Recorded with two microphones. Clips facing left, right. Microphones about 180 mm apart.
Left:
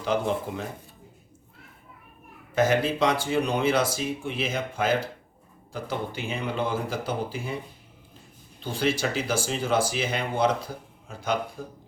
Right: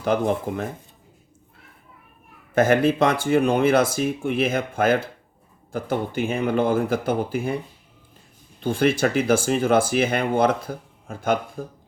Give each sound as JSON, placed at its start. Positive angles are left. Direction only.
{"t": 0.0, "sound": "speech", "side_deg": -55}
{"t": 2.6, "sound": "speech", "side_deg": -55}
{"t": 8.6, "sound": "speech", "side_deg": -55}